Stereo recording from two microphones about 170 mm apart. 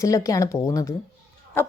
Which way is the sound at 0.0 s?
20° left (ahead or behind).